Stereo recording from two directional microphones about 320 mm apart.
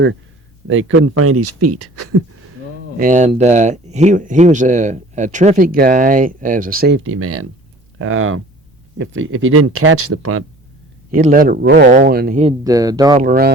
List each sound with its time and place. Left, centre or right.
0.7 s speech: right
3.0 s speech: right
11.1 s speech: right
13.2 s speech: right